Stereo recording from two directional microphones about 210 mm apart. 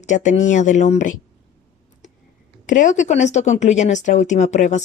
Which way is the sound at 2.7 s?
35° left (ahead or behind).